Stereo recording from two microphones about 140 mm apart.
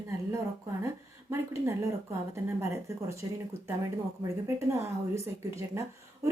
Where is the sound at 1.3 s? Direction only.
20° right (ahead or behind).